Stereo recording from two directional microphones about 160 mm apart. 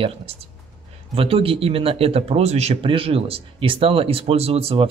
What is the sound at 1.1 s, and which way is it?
Speech, 35° right (ahead or behind).